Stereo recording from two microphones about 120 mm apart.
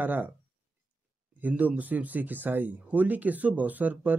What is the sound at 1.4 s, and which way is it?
Speech, 10° right (ahead or behind).